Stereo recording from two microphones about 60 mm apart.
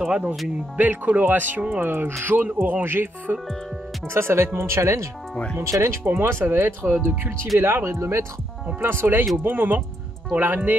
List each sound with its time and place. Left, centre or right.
0.0 s speech: centre
0.7 s speech: right
1.9 s speech: right
5.3 s speech: centre
5.6 s speech: right
6.2 s speech: right
8.8 s speech: right